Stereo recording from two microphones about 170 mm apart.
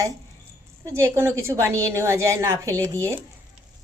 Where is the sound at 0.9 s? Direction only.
15° right (ahead or behind).